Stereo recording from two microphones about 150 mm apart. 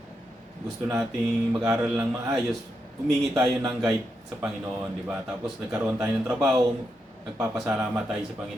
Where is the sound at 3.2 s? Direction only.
5° right (ahead or behind).